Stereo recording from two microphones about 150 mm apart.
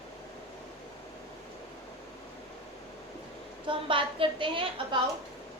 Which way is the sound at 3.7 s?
35° right (ahead or behind).